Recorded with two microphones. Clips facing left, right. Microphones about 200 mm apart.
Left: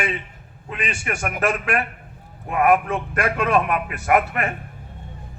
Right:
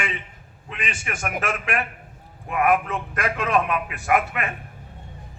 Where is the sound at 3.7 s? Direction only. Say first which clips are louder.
Left 3 dB; 40° left (ahead or behind).